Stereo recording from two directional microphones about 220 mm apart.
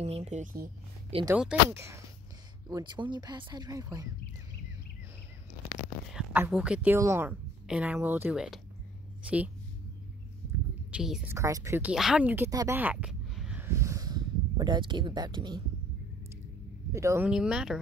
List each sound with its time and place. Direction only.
0.0 s speech: 30° right (ahead or behind)
1.2 s a woman's voice: 5° right (ahead or behind)
6.1 s a woman's voice: 5° right (ahead or behind)
10.9 s speech: 5° right (ahead or behind)
11.3 s speech: 15° right (ahead or behind)
16.9 s speech: 15° right (ahead or behind)